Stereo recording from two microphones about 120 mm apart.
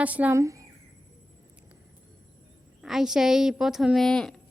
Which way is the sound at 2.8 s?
5° right (ahead or behind).